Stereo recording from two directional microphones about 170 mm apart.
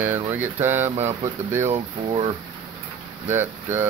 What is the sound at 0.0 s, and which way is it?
Speech, 10° right (ahead or behind).